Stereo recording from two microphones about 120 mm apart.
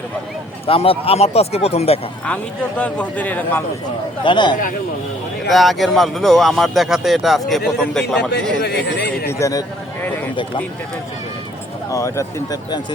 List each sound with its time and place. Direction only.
0.7 s speech: 55° left (ahead or behind)
2.2 s speech: 10° left (ahead or behind)
4.2 s a man's voice: 40° left (ahead or behind)
5.5 s speech: centre (ahead or behind)
9.4 s speech: 30° left (ahead or behind)
10.0 s a sound: 15° left (ahead or behind)
11.9 s speech: 25° left (ahead or behind)